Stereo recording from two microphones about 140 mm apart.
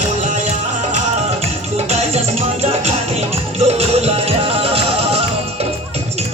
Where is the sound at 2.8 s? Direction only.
45° right (ahead or behind).